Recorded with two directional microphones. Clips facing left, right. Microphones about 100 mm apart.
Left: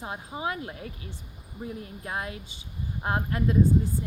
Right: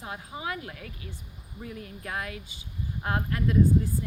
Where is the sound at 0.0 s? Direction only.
30° left (ahead or behind).